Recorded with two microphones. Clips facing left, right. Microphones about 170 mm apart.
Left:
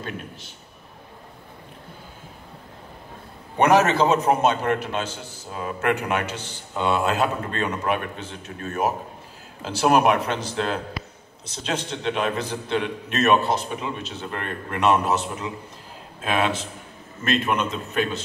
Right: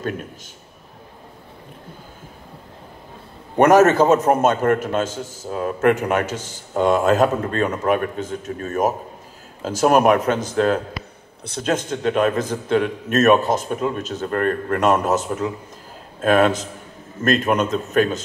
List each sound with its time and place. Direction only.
3.5 s a man's voice: 45° right (ahead or behind)